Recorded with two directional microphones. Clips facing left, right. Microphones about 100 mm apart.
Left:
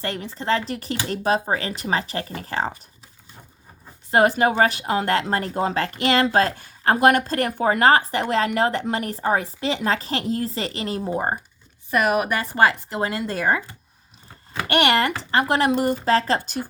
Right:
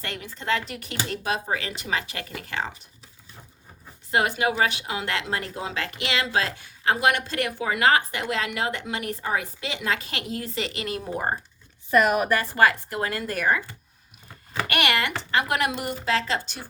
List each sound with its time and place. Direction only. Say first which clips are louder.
0.0 s speech: left 5 dB; 35° left (ahead or behind)
4.1 s speech: left 6 dB; 40° left (ahead or behind); by 11.3 s 25° left (ahead or behind)
11.9 s speech: even; 10° left (ahead or behind)
12.4 s a woman's voice: left 2 dB; 25° left (ahead or behind)
14.7 s speech: left 6 dB; 35° left (ahead or behind)